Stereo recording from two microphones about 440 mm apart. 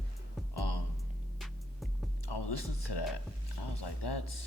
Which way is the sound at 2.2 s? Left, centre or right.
Left.